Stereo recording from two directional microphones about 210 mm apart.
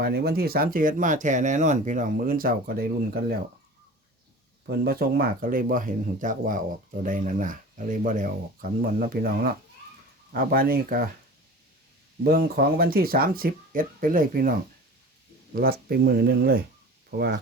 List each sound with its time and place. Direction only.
0.0 s speech: 45° right (ahead or behind)
4.6 s speech: 50° right (ahead or behind)
12.2 s speech: 45° right (ahead or behind)
15.5 s speech: 45° right (ahead or behind)